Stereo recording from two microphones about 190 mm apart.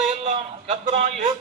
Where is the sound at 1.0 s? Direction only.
45° right (ahead or behind).